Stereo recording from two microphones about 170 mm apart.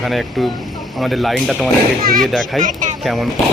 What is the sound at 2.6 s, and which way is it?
Speech, 50° right (ahead or behind).